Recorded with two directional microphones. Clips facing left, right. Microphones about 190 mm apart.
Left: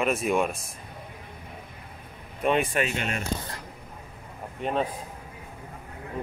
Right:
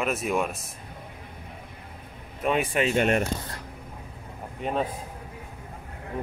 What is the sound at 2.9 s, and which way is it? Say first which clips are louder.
Speech: right 9 dB; 55° right (ahead or behind).